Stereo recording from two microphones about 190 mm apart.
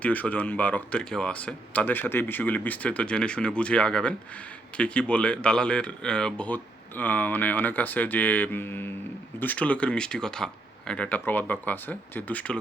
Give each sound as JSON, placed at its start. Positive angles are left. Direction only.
{"t": 0.0, "sound": "speech", "side_deg": 5}